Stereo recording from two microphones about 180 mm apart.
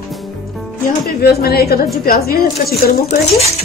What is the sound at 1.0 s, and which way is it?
A woman's voice, 60° left (ahead or behind).